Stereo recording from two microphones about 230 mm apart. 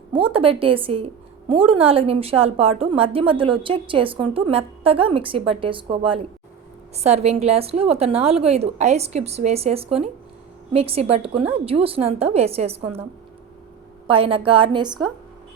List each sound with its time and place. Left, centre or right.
0.1 s a woman's voice: right
14.1 s a woman's voice: right